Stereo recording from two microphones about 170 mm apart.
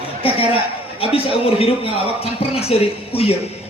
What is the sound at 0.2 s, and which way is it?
A man's voice, 35° left (ahead or behind).